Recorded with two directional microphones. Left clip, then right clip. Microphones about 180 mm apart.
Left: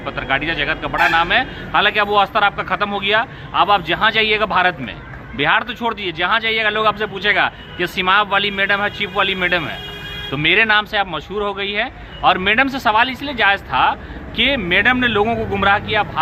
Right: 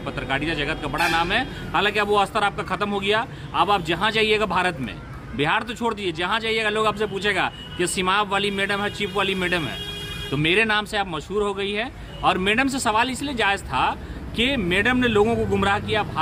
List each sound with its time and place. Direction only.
0.0 s speech: 15° right (ahead or behind)